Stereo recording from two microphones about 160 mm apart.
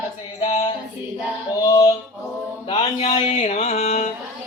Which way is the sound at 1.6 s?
25° left (ahead or behind).